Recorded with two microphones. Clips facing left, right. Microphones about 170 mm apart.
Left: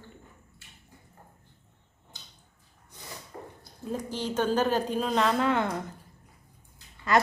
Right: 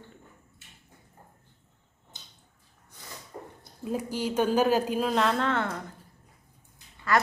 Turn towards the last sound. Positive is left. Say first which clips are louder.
# left 2 dB
turn(degrees=20)  # may be behind; listen again after turning